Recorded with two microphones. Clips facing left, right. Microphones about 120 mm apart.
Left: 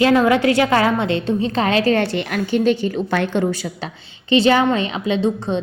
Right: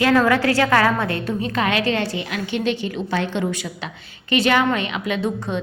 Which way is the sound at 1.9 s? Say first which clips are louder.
Left 5 dB; 65° left (ahead or behind).